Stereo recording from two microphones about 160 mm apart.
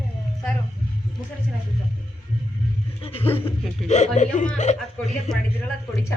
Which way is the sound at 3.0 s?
35° left (ahead or behind).